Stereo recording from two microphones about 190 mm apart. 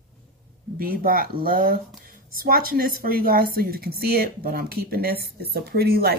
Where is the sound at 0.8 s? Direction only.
50° right (ahead or behind).